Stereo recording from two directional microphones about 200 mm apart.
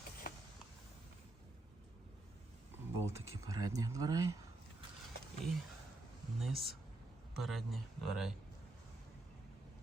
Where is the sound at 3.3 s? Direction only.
15° right (ahead or behind).